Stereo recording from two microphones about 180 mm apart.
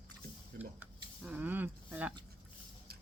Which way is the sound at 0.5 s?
65° right (ahead or behind).